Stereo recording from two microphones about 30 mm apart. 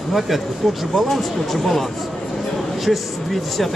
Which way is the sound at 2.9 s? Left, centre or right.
Centre.